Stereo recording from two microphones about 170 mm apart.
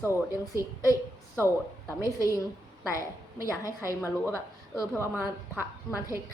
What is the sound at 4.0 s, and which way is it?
Speech, 15° left (ahead or behind).